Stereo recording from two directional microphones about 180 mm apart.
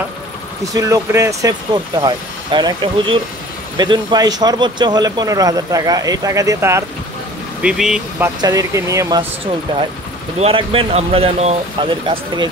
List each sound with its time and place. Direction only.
0.7 s speech: 20° right (ahead or behind)
7.6 s speech: 5° right (ahead or behind)
8.2 s speech: 20° right (ahead or behind)